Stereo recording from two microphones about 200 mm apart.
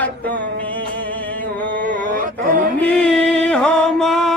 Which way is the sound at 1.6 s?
10° left (ahead or behind).